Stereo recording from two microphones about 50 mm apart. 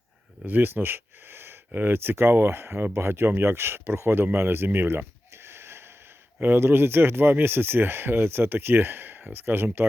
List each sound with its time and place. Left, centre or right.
0.4 s speech: right